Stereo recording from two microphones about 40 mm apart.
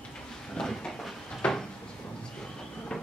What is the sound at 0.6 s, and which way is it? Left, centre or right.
Speech, centre.